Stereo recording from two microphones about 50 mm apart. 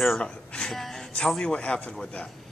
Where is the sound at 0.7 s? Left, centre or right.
Centre.